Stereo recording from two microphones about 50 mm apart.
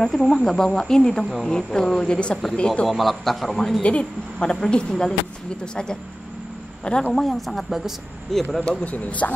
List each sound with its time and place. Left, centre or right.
0.0 s speech: centre
2.9 s a woman's voice: centre
3.8 s speech: left
6.8 s a woman's voice: centre
8.5 s speech: left